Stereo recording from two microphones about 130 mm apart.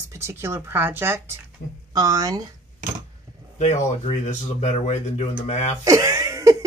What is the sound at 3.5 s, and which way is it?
Speech, 65° left (ahead or behind).